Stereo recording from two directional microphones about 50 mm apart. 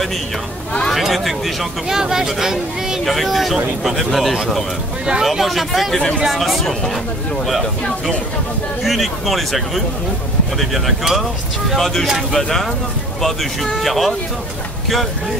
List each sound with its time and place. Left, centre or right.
0.9 s speech: centre
8.8 s speech: centre